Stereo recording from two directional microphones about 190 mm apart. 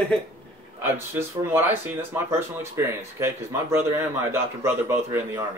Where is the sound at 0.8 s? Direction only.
10° right (ahead or behind).